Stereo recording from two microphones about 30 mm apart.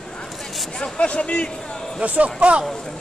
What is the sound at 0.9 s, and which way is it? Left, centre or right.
Speech, left.